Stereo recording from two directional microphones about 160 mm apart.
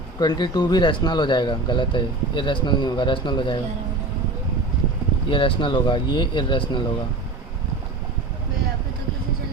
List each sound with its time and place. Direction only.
0.2 s speech: 25° left (ahead or behind)
5.3 s speech: 30° left (ahead or behind)